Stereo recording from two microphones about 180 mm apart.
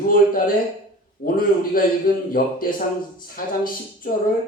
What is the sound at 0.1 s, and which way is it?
Speech, 50° left (ahead or behind).